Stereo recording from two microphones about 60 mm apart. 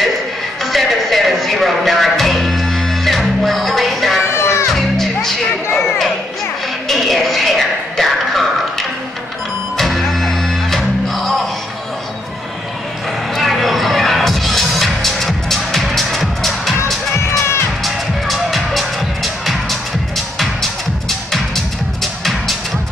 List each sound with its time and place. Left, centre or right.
0.7 s music: centre
4.2 s music: left
4.7 s music: centre
6.9 s a sound: centre
9.8 s music: centre
13.3 s music: centre
17.8 s music: centre